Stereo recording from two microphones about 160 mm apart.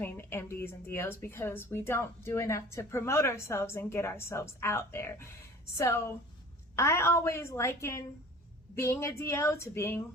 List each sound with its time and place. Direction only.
0.0 s a woman's voice: 15° left (ahead or behind)